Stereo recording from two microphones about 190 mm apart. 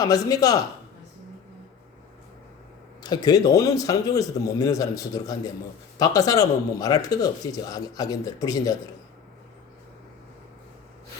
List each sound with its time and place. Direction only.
0.0 s a man's voice: 20° left (ahead or behind)
3.0 s a man's voice: 20° left (ahead or behind)